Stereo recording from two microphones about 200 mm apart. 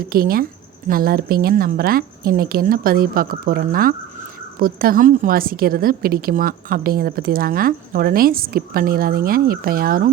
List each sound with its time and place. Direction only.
0.0 s a woman's voice: 50° right (ahead or behind)